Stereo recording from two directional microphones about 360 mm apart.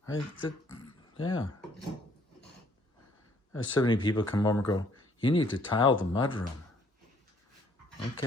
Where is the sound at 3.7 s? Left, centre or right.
Centre.